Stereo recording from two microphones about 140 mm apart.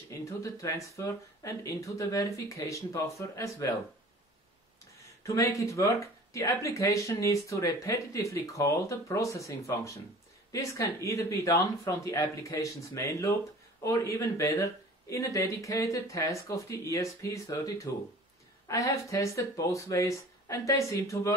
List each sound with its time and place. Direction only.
0.2 s speech: 25° left (ahead or behind)
5.2 s speech: 20° left (ahead or behind)